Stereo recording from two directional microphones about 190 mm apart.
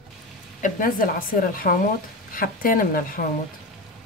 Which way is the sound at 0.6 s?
45° left (ahead or behind).